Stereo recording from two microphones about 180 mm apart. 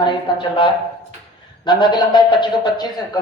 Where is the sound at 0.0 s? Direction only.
25° left (ahead or behind).